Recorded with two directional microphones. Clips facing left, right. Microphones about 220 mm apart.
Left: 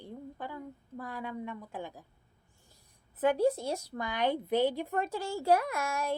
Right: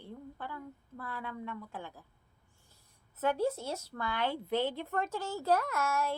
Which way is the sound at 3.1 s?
15° left (ahead or behind).